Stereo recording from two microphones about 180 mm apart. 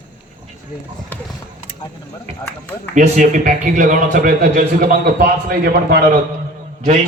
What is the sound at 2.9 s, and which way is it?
A man's voice, 45° right (ahead or behind).